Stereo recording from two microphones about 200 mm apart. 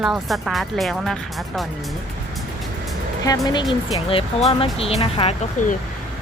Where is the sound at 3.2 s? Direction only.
20° left (ahead or behind).